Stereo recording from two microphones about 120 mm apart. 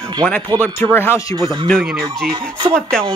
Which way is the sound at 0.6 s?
15° left (ahead or behind).